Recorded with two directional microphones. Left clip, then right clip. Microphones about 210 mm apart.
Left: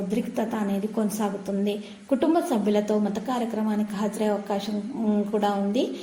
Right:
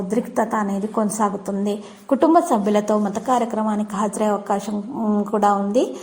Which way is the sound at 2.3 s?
10° right (ahead or behind).